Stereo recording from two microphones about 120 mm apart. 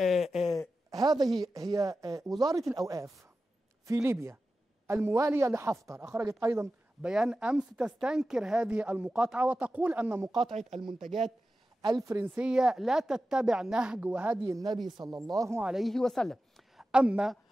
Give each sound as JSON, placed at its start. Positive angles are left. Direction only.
{"t": 0.0, "sound": "a sound", "side_deg": 0}
{"t": 0.8, "sound": "a sound", "side_deg": -35}
{"t": 1.4, "sound": "a man's voice", "side_deg": -30}
{"t": 7.0, "sound": "speech", "side_deg": -5}
{"t": 11.8, "sound": "a man's voice", "side_deg": -30}
{"t": 12.4, "sound": "speech", "side_deg": -5}
{"t": 14.4, "sound": "a man's voice", "side_deg": -30}
{"t": 15.6, "sound": "speech", "side_deg": 0}
{"t": 16.9, "sound": "speech", "side_deg": -10}